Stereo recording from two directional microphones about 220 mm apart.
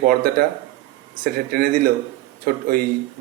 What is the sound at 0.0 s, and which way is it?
A man's voice, 45° right (ahead or behind).